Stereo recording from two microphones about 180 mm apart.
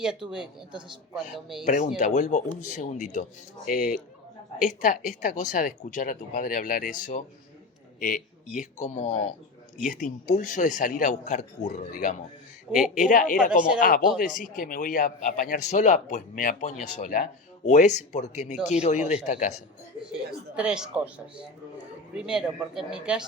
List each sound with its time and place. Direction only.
0.0 s a man's voice: 5° right (ahead or behind)
1.6 s speech: 40° left (ahead or behind)
20.6 s a man's voice: 5° right (ahead or behind)
22.1 s a man's voice: 5° right (ahead or behind)